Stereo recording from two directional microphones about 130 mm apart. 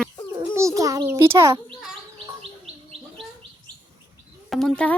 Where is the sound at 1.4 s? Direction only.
30° right (ahead or behind).